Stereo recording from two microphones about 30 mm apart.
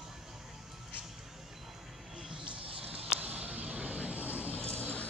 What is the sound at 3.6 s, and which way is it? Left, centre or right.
Vehicle, right.